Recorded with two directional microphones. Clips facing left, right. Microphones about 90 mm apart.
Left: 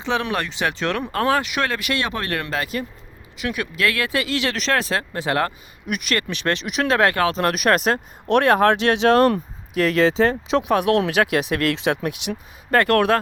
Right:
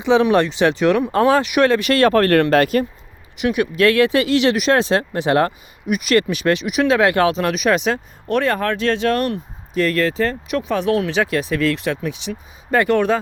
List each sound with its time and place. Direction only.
0.0 s speech: 20° right (ahead or behind)
1.9 s speech: 45° right (ahead or behind)
3.3 s speech: 20° right (ahead or behind)
4.5 s speech: 15° right (ahead or behind)
4.8 s speech: 25° right (ahead or behind)
5.9 s speech: 5° right (ahead or behind)
7.1 s speech: 20° right (ahead or behind)
7.5 s speech: centre (ahead or behind)
8.3 s speech: 70° left (ahead or behind); by 9.2 s 90° left
9.7 s speech: 15° left (ahead or behind)
10.7 s speech: 65° left (ahead or behind)
12.7 s speech: centre (ahead or behind)